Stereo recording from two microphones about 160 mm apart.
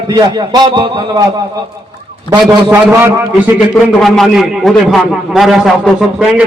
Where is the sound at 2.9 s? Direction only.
15° right (ahead or behind).